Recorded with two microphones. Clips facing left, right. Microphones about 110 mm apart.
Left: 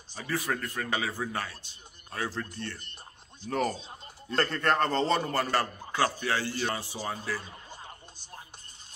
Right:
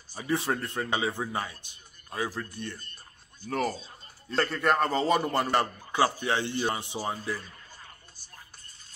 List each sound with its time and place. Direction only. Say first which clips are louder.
0.1 s a man's voice: right 3 dB; 20° right (ahead or behind)
3.4 s a man's voice: even; centre (ahead or behind); by 7.2 s 20° right (ahead or behind)
7.3 s a sound: left 2 dB; 20° left (ahead or behind)